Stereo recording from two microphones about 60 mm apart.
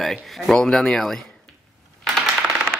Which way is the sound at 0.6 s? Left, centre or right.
Centre.